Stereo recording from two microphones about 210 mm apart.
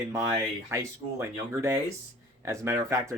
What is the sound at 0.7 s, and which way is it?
Speech, 15° right (ahead or behind).